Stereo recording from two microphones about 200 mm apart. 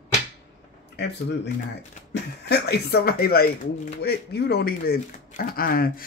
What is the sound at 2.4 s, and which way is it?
Speech, 55° left (ahead or behind).